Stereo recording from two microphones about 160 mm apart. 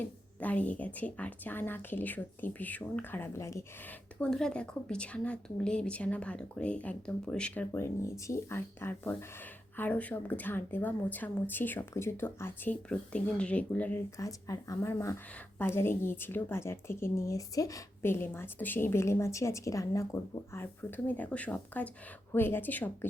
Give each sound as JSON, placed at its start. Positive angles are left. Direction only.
{"t": 0.0, "sound": "a woman's voice", "side_deg": 10}
{"t": 4.2, "sound": "a woman's voice", "side_deg": 5}
{"t": 14.2, "sound": "a woman's voice", "side_deg": 20}